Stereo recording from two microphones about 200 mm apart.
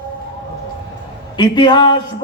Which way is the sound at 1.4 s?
20° left (ahead or behind).